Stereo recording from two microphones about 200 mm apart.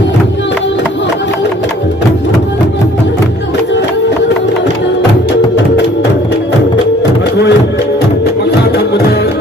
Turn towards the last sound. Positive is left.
turn(degrees=60)  # may be behind; listen again after turning